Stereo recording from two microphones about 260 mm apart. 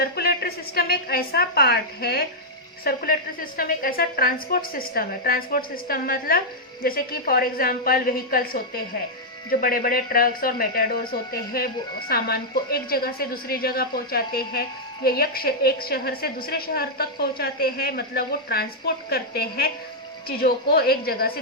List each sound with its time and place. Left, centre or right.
0.0 s a woman's voice: left